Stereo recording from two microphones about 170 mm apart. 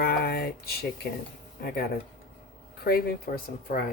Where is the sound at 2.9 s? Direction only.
60° left (ahead or behind).